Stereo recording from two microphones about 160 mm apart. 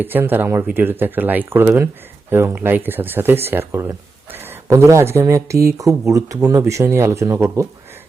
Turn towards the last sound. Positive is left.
turn(degrees=-15)  # may be behind; listen again after turning